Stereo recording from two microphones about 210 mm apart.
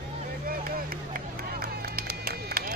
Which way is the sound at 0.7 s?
45° right (ahead or behind).